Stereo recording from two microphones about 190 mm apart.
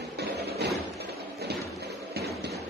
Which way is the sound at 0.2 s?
60° right (ahead or behind).